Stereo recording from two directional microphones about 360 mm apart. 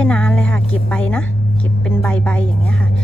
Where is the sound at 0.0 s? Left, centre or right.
Centre.